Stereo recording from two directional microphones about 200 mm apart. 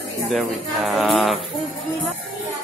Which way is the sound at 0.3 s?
Centre (ahead or behind).